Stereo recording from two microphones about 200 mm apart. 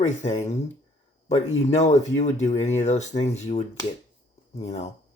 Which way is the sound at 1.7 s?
35° left (ahead or behind).